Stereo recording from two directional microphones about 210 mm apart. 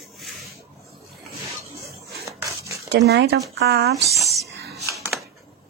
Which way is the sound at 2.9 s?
55° right (ahead or behind).